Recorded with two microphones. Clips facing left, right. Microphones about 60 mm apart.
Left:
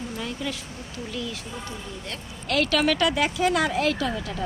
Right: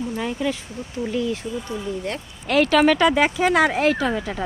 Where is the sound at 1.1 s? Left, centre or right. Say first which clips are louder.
Right 9 dB; right.